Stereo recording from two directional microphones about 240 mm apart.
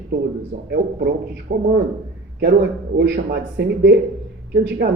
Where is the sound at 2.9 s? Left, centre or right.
Right.